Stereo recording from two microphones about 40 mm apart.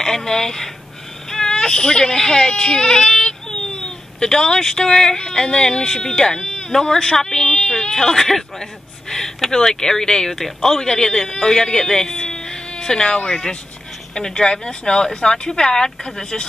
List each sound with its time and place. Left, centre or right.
0.0 s speech: centre